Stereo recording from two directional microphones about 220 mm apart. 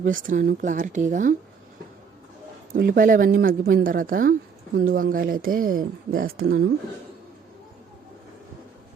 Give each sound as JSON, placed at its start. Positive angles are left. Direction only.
{"t": 0.0, "sound": "speech", "side_deg": -35}
{"t": 2.7, "sound": "speech", "side_deg": -40}